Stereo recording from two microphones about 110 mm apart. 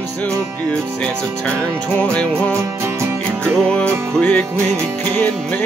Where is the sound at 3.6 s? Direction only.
10° left (ahead or behind).